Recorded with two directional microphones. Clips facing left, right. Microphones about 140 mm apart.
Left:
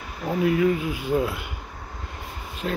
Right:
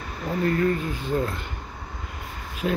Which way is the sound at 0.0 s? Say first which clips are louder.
Left 2 dB; 5° left (ahead or behind).